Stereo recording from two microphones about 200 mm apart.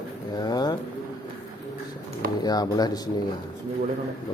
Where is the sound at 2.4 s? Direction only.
20° left (ahead or behind).